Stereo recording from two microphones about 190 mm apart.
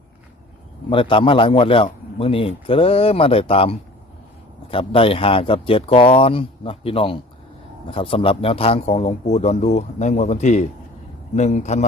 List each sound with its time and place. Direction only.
0.9 s a man's voice: 25° left (ahead or behind)